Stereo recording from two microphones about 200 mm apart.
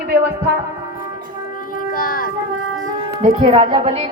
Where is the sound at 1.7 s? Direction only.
45° left (ahead or behind).